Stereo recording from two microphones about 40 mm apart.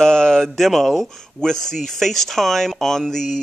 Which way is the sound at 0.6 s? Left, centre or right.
Centre.